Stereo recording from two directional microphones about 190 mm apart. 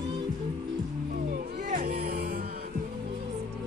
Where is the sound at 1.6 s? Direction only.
45° right (ahead or behind).